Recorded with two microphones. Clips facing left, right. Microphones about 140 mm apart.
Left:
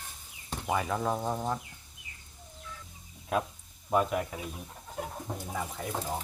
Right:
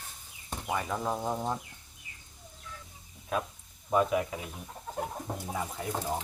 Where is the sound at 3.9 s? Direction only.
Centre (ahead or behind).